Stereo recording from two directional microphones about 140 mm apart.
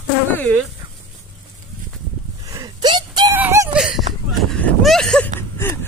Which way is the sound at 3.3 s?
15° right (ahead or behind).